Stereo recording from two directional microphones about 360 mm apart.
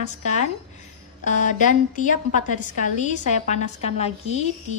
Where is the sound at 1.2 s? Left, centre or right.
Left.